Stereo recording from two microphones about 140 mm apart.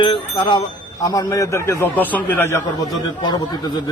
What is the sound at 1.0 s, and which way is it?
A man's voice, 25° left (ahead or behind).